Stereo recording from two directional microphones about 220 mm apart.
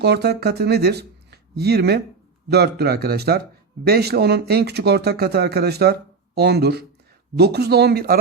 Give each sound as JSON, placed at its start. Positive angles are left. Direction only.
{"t": 0.0, "sound": "speech", "side_deg": -50}